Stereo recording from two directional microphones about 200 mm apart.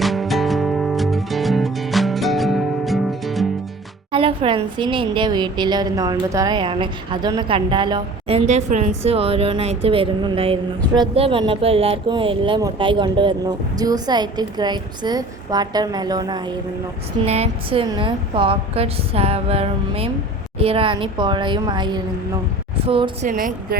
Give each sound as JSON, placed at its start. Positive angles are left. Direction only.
{"t": 0.0, "sound": "music", "side_deg": 0}
{"t": 4.1, "sound": "a woman's voice", "side_deg": -25}
{"t": 17.2, "sound": "a woman's voice", "side_deg": -30}
{"t": 23.2, "sound": "speech", "side_deg": -40}